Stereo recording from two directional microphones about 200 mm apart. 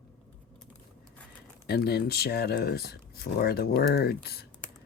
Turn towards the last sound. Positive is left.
turn(degrees=50)  # may be behind; listen again after turning